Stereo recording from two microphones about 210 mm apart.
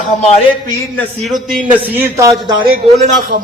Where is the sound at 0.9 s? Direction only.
Centre (ahead or behind); by 2.5 s 15° right (ahead or behind).